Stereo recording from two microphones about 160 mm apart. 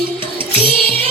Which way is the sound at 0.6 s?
35° right (ahead or behind).